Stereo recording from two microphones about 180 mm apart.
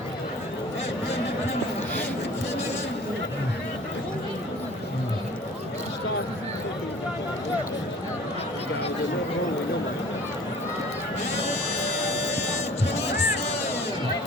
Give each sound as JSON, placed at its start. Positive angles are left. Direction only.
{"t": 12.9, "sound": "music", "side_deg": 35}
{"t": 13.1, "sound": "music", "side_deg": 65}